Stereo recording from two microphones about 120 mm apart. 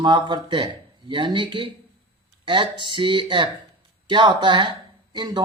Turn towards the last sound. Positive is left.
turn(degrees=-40)  # may be behind; listen again after turning